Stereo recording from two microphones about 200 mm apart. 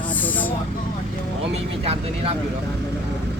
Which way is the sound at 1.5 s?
30° right (ahead or behind).